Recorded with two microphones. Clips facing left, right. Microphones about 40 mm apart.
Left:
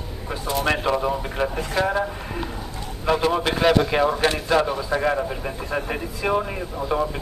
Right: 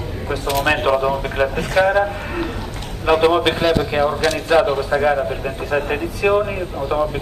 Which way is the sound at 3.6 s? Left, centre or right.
Centre.